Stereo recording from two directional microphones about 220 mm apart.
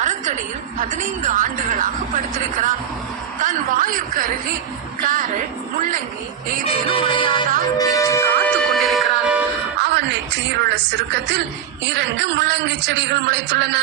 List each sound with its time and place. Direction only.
0.0 s a sound: 35° right (ahead or behind)
0.8 s a woman's voice: 35° right (ahead or behind)
3.4 s a sound: 35° right (ahead or behind)
5.0 s a woman's voice: 40° right (ahead or behind)
6.7 s music: 25° left (ahead or behind); by 9.4 s centre (ahead or behind)
9.8 s a woman's voice: 50° right (ahead or behind)